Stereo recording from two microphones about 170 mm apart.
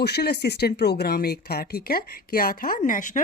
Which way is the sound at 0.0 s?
70° left (ahead or behind).